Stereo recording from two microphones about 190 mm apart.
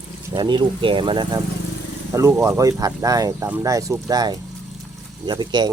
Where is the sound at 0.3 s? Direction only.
25° right (ahead or behind).